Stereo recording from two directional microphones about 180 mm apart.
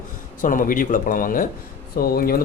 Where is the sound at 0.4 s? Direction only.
50° left (ahead or behind).